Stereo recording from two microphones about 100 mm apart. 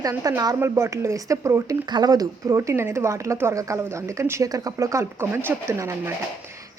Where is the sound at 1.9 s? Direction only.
45° right (ahead or behind).